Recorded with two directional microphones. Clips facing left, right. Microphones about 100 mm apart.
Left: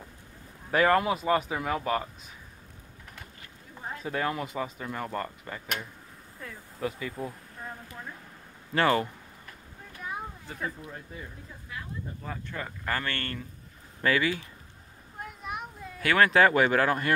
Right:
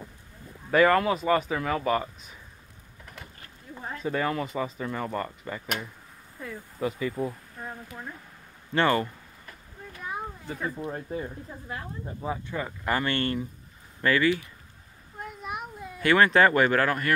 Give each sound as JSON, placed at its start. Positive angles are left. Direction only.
{"t": 0.7, "sound": "speech", "side_deg": 5}
{"t": 4.0, "sound": "speech", "side_deg": 5}
{"t": 10.0, "sound": "a sound", "side_deg": 0}
{"t": 10.8, "sound": "speech", "side_deg": -40}
{"t": 12.2, "sound": "speech", "side_deg": -15}
{"t": 14.0, "sound": "speech", "side_deg": 10}
{"t": 15.1, "sound": "a sound", "side_deg": 0}
{"t": 16.0, "sound": "speech", "side_deg": 0}